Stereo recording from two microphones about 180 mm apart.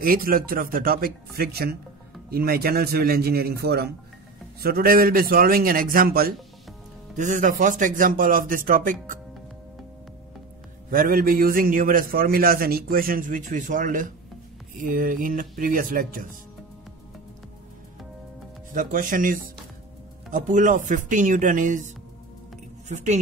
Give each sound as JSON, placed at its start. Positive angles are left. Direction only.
{"t": 0.0, "sound": "a man's voice", "side_deg": -55}
{"t": 7.2, "sound": "a man's voice", "side_deg": -45}
{"t": 10.9, "sound": "a man's voice", "side_deg": -50}
{"t": 18.7, "sound": "a man's voice", "side_deg": -50}